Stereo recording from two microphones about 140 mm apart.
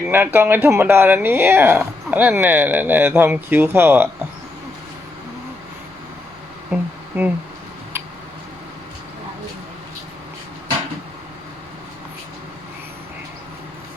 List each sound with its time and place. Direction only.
0.1 s speech: 15° right (ahead or behind)
6.7 s speech: 10° right (ahead or behind)